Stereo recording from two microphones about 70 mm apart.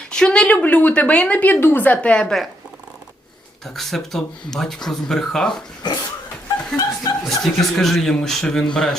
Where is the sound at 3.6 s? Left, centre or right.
Centre.